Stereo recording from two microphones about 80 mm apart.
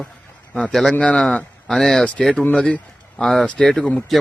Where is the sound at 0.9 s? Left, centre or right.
Centre.